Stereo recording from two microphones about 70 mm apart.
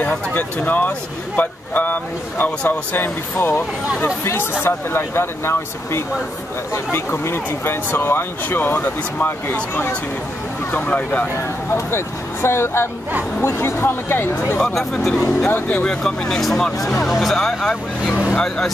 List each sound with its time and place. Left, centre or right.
0.0 s speech: left
11.3 s speech: left
14.6 s speech: centre
15.4 s speech: left
15.8 s speech: centre